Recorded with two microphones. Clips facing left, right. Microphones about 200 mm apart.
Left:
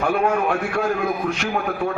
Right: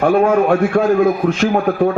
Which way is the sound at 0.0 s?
45° right (ahead or behind).